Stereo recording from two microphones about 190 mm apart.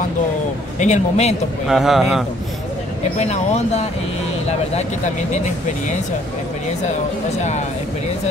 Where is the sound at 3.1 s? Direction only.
35° left (ahead or behind).